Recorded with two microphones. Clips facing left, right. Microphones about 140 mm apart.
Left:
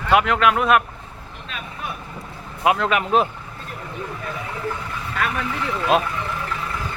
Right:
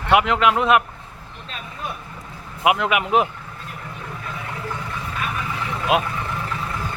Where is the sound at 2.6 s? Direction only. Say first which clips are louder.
Even; 15° right (ahead or behind).